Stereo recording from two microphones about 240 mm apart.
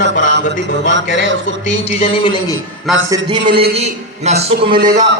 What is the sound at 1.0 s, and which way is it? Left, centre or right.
Speech, right.